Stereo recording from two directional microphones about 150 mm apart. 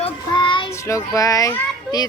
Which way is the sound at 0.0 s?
35° left (ahead or behind).